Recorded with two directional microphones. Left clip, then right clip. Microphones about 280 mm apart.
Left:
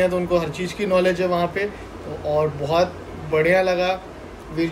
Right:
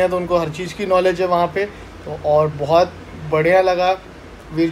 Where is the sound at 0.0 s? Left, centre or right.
Centre.